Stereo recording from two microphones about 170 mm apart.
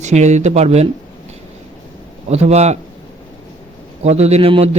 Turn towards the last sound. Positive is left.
turn(degrees=-35)  # may be behind; listen again after turning